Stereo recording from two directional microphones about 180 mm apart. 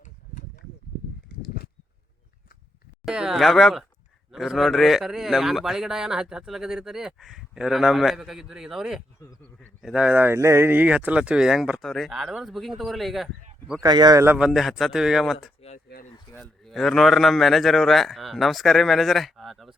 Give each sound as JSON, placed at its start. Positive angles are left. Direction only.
{"t": 0.0, "sound": "a sound", "side_deg": 45}
{"t": 1.4, "sound": "a sound", "side_deg": 60}
{"t": 3.0, "sound": "a man's voice", "side_deg": -5}
{"t": 13.8, "sound": "speech", "side_deg": -25}
{"t": 14.3, "sound": "a man's voice", "side_deg": -5}
{"t": 16.6, "sound": "a man's voice", "side_deg": 0}